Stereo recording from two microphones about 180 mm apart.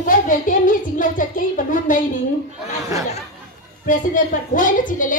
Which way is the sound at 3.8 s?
45° left (ahead or behind).